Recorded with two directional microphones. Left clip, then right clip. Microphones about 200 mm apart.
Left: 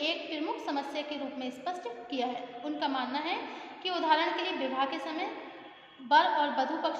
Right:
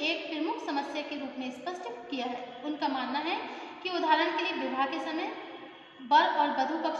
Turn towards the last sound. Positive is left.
turn(degrees=35)  # may be behind; listen again after turning